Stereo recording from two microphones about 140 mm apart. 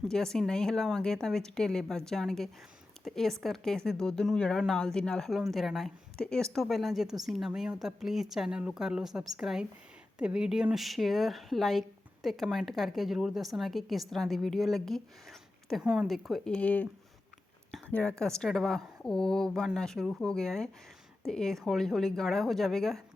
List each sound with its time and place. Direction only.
0.1 s speech: 5° left (ahead or behind)
17.7 s a sound: 10° left (ahead or behind)
18.2 s speech: 5° left (ahead or behind)